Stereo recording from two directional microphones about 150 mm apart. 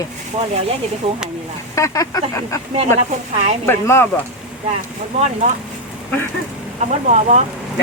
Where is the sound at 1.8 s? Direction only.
20° left (ahead or behind).